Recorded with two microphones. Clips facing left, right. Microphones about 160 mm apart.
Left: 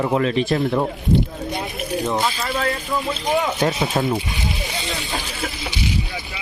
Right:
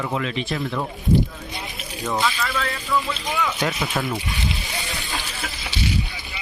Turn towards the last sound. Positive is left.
turn(degrees=20)  # may be behind; listen again after turning